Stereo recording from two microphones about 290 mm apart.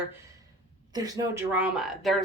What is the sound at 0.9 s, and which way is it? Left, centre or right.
Speech, centre.